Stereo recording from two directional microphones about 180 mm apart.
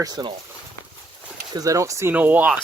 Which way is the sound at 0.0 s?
25° right (ahead or behind).